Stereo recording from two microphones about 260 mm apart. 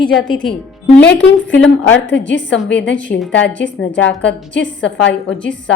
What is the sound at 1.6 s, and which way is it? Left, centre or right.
Speech, left.